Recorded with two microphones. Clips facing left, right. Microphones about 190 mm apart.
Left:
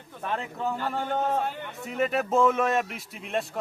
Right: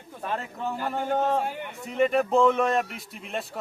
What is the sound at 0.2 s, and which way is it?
A man's voice, 5° right (ahead or behind).